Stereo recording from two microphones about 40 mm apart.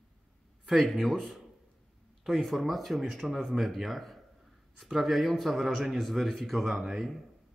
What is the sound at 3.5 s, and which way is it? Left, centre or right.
Speech, centre.